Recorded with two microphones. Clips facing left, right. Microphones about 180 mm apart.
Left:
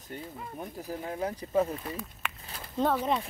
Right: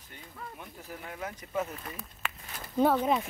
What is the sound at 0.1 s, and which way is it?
Speech, 35° left (ahead or behind).